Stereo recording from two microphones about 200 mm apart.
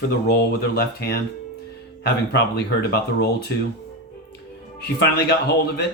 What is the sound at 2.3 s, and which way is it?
Speech, 55° left (ahead or behind).